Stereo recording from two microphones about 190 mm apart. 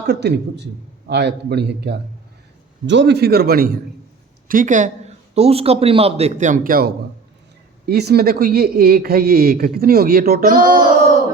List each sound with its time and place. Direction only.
0.1 s a man's voice: 60° right (ahead or behind)